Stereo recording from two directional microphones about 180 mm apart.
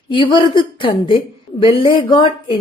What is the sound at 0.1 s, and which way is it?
A woman's voice, 25° left (ahead or behind).